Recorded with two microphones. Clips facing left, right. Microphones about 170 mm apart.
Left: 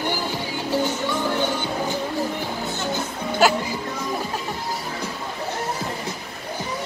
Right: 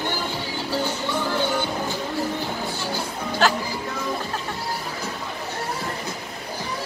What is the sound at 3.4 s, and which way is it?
Speech, 10° left (ahead or behind).